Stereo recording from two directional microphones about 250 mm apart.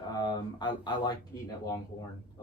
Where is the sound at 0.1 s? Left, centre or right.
Centre.